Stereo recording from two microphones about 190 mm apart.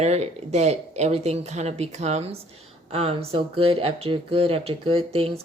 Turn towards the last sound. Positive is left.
turn(degrees=-30)  # may be behind; listen again after turning